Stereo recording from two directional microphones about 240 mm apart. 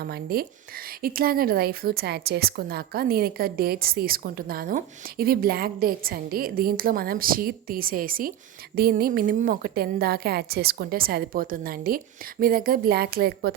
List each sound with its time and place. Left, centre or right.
0.0 s a woman's voice: right